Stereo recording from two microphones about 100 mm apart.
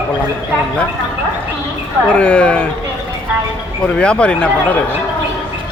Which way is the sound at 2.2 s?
15° left (ahead or behind).